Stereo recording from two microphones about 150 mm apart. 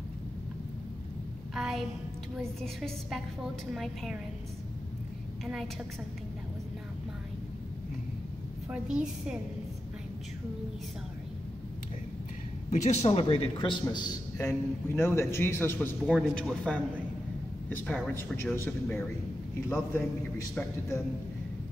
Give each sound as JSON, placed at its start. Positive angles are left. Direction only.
{"t": 1.5, "sound": "a sound", "side_deg": 0}
{"t": 2.3, "sound": "a woman's voice", "side_deg": 0}
{"t": 5.4, "sound": "a woman's voice", "side_deg": 0}
{"t": 8.6, "sound": "a woman's voice", "side_deg": -5}
{"t": 12.6, "sound": "a man's voice", "side_deg": 50}
{"t": 14.9, "sound": "a man's voice", "side_deg": 15}
{"t": 16.1, "sound": "a woman's voice", "side_deg": 5}